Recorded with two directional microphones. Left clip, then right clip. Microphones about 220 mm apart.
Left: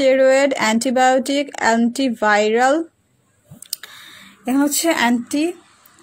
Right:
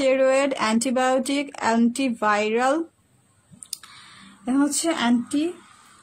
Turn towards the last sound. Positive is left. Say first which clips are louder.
# left 5 dB
turn(degrees=25)  # may be behind; listen again after turning